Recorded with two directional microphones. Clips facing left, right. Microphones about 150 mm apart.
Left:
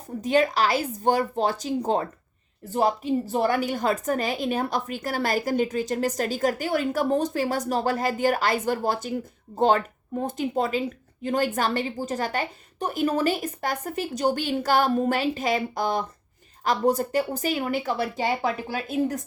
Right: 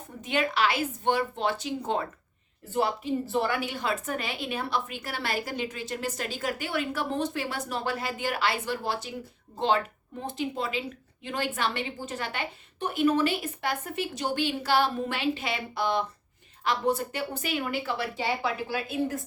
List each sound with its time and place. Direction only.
0.2 s a woman's voice: 40° left (ahead or behind)